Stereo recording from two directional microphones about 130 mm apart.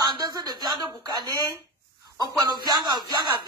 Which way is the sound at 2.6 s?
30° right (ahead or behind).